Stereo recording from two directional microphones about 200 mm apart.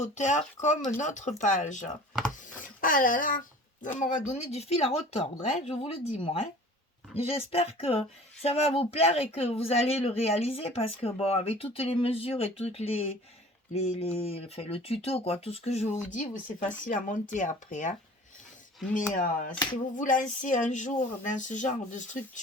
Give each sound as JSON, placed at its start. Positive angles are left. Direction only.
{"t": 0.0, "sound": "speech", "side_deg": 35}
{"t": 18.9, "sound": "speech", "side_deg": 40}